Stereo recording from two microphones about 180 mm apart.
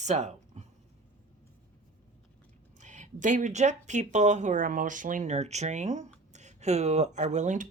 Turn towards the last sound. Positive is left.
turn(degrees=-45)  # may be behind; listen again after turning